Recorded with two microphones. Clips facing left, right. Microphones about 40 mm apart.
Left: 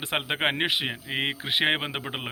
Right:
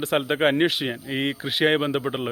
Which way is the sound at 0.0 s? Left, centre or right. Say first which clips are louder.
Right 5 dB; left.